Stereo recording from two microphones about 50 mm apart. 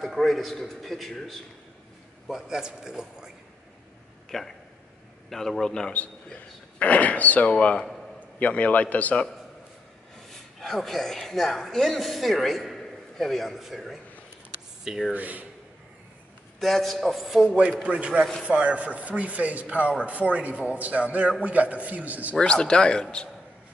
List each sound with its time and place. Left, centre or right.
0.0 s a woman's voice: centre
2.2 s a man's voice: centre
4.3 s a woman's voice: centre
5.7 s a man's voice: centre
5.9 s speech: left
7.5 s speech: centre
8.4 s speech: left
10.6 s a woman's voice: centre
15.1 s a man's voice: right
16.5 s a woman's voice: centre
17.5 s a man's voice: right
22.4 s speech: centre